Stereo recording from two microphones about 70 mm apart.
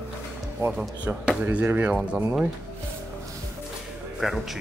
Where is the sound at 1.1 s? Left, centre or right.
Right.